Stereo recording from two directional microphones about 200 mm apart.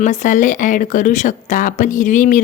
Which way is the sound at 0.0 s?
40° left (ahead or behind).